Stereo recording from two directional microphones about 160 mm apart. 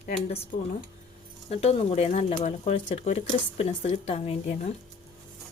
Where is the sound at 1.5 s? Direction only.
40° left (ahead or behind).